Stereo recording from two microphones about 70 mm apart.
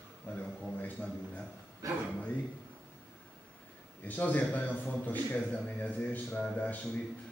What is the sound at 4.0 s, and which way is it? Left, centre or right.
A man's voice, left.